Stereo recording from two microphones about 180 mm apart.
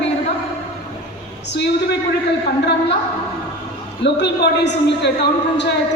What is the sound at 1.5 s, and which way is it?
Speech, 70° left (ahead or behind).